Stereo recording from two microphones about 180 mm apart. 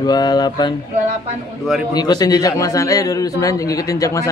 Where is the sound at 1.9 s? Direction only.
20° left (ahead or behind).